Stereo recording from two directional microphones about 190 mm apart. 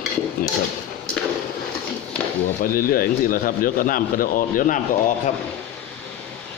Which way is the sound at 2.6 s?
50° left (ahead or behind).